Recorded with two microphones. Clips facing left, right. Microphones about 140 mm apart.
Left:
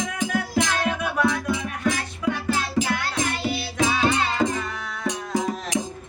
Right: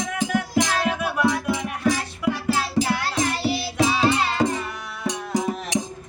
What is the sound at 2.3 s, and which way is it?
Music, 35° right (ahead or behind).